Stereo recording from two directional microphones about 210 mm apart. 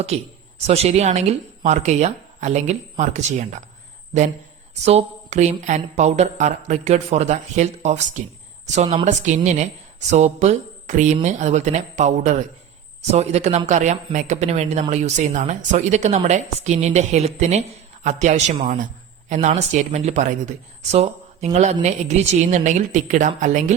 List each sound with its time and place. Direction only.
0.1 s speech: 30° right (ahead or behind)
4.9 s speech: 30° right (ahead or behind)